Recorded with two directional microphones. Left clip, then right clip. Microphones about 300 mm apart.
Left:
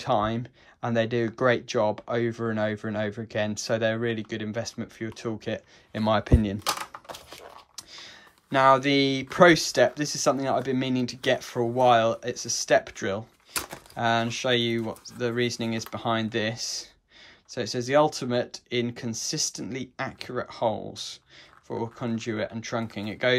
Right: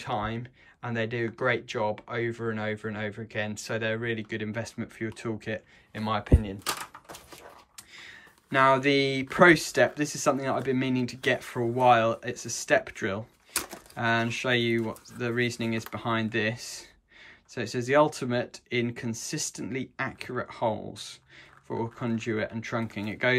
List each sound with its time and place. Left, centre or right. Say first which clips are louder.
0.0 s speech: left 6 dB; centre